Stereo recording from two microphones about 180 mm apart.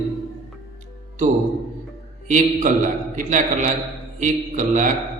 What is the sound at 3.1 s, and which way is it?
A man's voice, 45° right (ahead or behind).